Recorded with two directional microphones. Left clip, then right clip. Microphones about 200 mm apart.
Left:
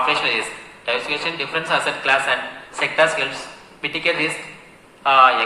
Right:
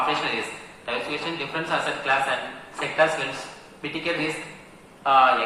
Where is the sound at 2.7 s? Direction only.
30° left (ahead or behind).